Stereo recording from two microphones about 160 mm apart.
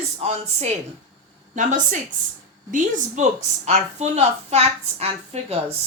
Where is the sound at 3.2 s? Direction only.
50° right (ahead or behind).